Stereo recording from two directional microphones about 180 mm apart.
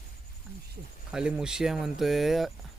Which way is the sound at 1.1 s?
5° right (ahead or behind).